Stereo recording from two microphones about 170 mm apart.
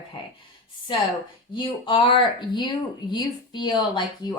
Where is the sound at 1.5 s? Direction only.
25° left (ahead or behind).